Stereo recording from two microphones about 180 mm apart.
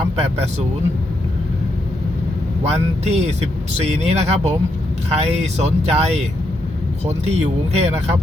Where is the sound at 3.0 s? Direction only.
35° right (ahead or behind).